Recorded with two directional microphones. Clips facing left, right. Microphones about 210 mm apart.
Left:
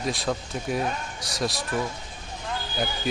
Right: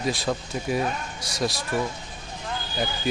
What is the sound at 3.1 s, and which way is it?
Speech, centre (ahead or behind).